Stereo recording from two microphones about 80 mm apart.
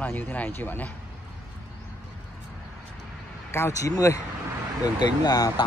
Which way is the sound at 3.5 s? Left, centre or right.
Left.